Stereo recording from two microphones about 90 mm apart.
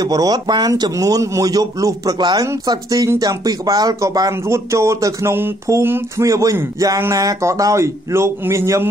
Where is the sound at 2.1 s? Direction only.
50° right (ahead or behind).